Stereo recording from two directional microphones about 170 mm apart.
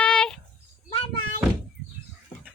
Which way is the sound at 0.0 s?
5° left (ahead or behind).